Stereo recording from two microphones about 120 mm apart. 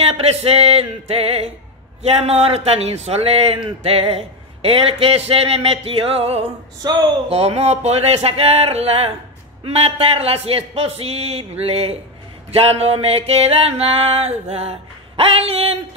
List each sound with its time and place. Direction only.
0.0 s music: 55° right (ahead or behind)
2.0 s speech: 60° right (ahead or behind)
6.8 s speech: 35° right (ahead or behind)
7.2 s speech: 60° right (ahead or behind)